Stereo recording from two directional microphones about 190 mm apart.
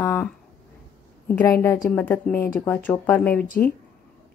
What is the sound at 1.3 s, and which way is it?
Speech, 10° left (ahead or behind).